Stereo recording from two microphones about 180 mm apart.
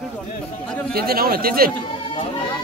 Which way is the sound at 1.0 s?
55° right (ahead or behind).